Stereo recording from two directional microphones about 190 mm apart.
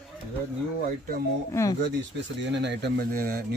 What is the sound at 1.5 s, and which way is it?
Speech, 15° left (ahead or behind).